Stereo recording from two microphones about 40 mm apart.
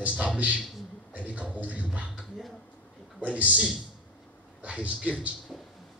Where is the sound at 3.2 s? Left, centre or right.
Right.